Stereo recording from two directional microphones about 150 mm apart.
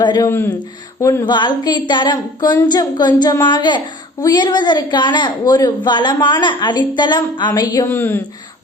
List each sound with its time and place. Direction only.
0.0 s a woman's voice: 30° left (ahead or behind)
0.3 s speech: 15° left (ahead or behind)
1.2 s a woman's voice: 30° left (ahead or behind); by 8.2 s 15° left (ahead or behind)